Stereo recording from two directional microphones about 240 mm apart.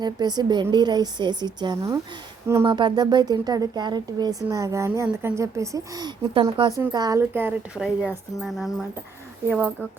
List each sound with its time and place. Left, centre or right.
0.0 s speech: centre